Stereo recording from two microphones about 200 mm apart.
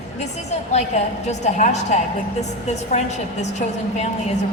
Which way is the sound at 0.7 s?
35° left (ahead or behind).